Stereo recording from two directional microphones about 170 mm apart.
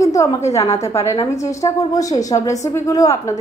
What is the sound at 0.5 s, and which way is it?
A woman's voice, 20° left (ahead or behind).